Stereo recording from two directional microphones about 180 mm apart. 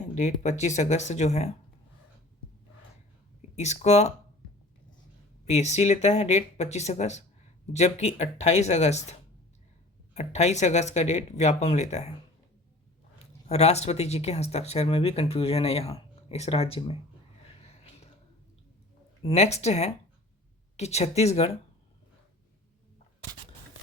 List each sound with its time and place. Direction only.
0.1 s speech: 40° left (ahead or behind)
3.5 s speech: 40° left (ahead or behind)
5.5 s speech: 40° left (ahead or behind)
10.2 s speech: 40° left (ahead or behind)
13.1 s speech: 35° left (ahead or behind)
17.4 s a sound: 35° left (ahead or behind)
19.2 s speech: 35° left (ahead or behind)